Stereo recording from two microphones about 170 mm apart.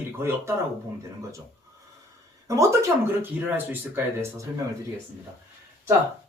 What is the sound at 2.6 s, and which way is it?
Speech, 15° right (ahead or behind).